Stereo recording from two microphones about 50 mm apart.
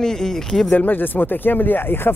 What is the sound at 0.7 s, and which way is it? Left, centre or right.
A man's voice, left.